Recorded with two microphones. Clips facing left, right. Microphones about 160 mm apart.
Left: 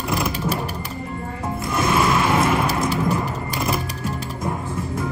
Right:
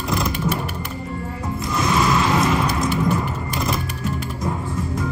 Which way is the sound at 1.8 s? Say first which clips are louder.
Even; 25° left (ahead or behind).